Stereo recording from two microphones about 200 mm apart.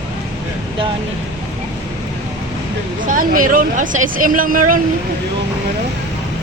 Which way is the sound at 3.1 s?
40° right (ahead or behind).